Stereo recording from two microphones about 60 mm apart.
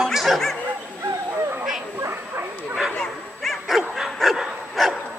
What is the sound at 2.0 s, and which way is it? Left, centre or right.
Bow-wow, right.